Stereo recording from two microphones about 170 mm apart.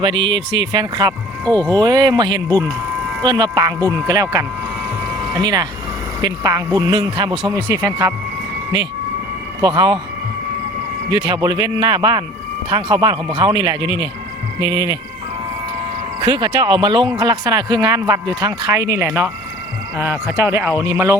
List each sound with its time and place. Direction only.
0.2 s speech: 90° right
0.7 s speech: 25° right (ahead or behind)
1.5 s speech: 10° left (ahead or behind)
1.8 s speech: 25° right (ahead or behind)
2.5 s speech: 10° left (ahead or behind)
3.2 s speech: 25° right (ahead or behind)
9.6 s speech: 25° right (ahead or behind)
11.1 s speech: 25° right (ahead or behind)
16.2 s speech: 30° right (ahead or behind)